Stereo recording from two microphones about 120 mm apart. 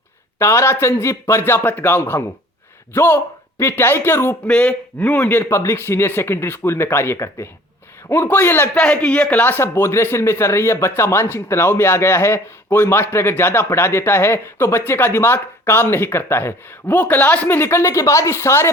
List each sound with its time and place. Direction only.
0.3 s a man's voice: 20° left (ahead or behind)